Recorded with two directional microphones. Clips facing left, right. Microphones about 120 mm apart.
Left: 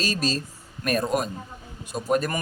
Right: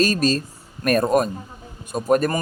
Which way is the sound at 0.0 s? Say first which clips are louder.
Right 7 dB; 50° right (ahead or behind).